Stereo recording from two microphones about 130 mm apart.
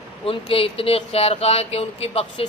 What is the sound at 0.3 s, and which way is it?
Speech, 45° left (ahead or behind).